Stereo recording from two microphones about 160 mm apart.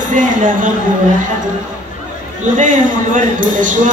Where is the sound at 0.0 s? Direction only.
55° right (ahead or behind).